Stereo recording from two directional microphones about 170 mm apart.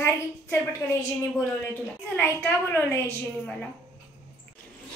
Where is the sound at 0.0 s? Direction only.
15° left (ahead or behind).